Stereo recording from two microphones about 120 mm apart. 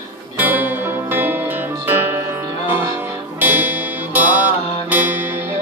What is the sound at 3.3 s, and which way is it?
Music, 15° right (ahead or behind).